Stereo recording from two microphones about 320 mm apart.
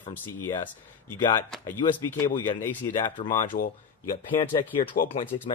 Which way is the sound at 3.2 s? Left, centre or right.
Centre.